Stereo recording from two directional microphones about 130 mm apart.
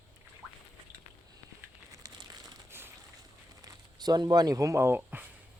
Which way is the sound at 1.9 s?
30° right (ahead or behind).